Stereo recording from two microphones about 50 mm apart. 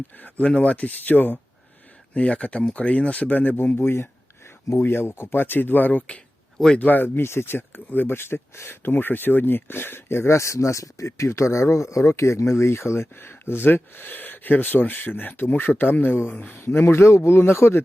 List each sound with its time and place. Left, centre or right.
0.2 s speech: left
2.1 s speech: left